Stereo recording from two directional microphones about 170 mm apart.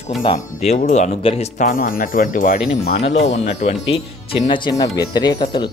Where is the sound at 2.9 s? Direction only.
40° left (ahead or behind).